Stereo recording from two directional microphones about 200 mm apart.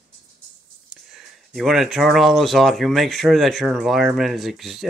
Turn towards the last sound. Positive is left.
turn(degrees=0)  # may be behind; listen again after turning